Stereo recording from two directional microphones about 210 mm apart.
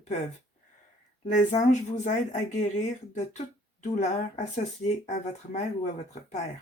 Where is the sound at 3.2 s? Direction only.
35° left (ahead or behind).